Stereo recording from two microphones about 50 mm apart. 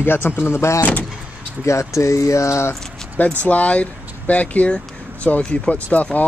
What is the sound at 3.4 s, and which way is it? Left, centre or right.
Speech, left.